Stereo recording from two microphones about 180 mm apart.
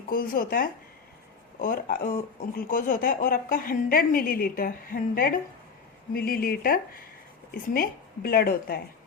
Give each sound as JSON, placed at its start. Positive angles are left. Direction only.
{"t": 0.1, "sound": "a woman's voice", "side_deg": 50}